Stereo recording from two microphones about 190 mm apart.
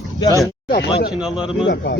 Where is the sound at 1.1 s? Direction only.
5° right (ahead or behind).